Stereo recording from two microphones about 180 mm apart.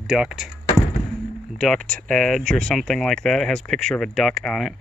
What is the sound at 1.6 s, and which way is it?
Speech, 5° left (ahead or behind).